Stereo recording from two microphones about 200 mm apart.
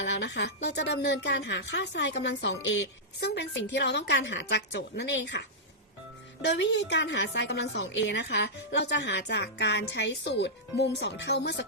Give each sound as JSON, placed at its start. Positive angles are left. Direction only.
{"t": 0.0, "sound": "a woman's voice", "side_deg": 65}
{"t": 6.4, "sound": "a woman's voice", "side_deg": 60}